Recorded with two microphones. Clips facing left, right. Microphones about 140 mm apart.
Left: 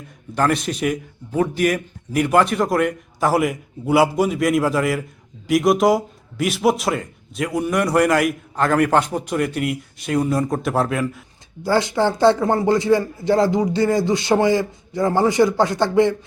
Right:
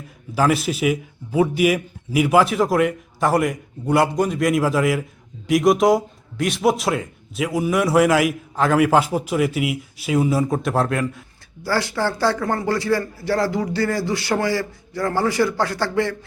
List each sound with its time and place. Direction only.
0.3 s a man's voice: 5° right (ahead or behind)
11.6 s speech: 20° left (ahead or behind)